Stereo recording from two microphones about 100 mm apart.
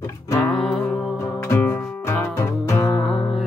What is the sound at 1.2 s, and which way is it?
Music, 25° left (ahead or behind).